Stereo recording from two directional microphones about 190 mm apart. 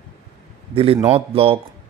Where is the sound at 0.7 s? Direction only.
30° right (ahead or behind).